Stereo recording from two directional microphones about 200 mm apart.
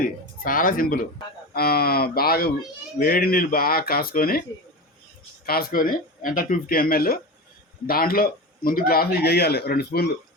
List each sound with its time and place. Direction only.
0.0 s speech: 45° left (ahead or behind)
5.5 s speech: 50° left (ahead or behind)